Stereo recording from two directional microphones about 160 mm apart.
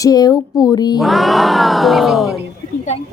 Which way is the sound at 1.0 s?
Centre (ahead or behind).